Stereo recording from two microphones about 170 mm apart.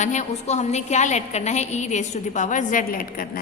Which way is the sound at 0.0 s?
45° left (ahead or behind).